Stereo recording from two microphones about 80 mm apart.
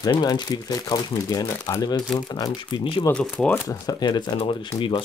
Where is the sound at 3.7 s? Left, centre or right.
Left.